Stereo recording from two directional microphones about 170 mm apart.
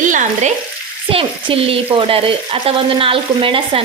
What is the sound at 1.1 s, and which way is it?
Frying, 35° right (ahead or behind).